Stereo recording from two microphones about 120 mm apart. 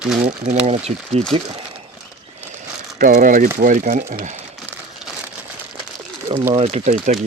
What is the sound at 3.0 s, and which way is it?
Speech, 90° right.